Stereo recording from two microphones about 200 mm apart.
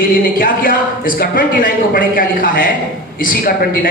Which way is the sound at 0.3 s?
45° left (ahead or behind).